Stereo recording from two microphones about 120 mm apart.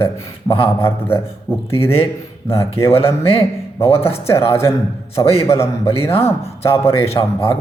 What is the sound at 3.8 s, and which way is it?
Speech, 55° left (ahead or behind).